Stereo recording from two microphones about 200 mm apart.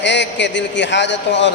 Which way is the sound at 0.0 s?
60° left (ahead or behind).